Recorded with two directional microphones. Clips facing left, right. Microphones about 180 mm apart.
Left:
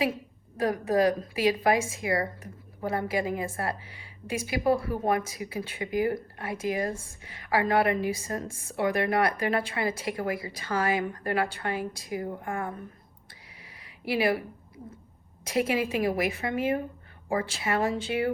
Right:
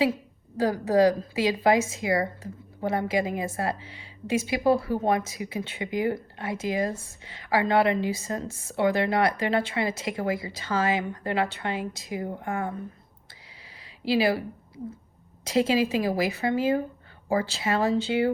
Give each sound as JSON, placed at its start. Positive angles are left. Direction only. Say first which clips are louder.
{"t": 0.5, "sound": "a woman's voice", "louder": "right 3 dB", "side_deg": -30}
{"t": 13.8, "sound": "speech", "louder": "right 3 dB", "side_deg": -25}
{"t": 15.4, "sound": "a woman's voice", "louder": "right 4 dB", "side_deg": -25}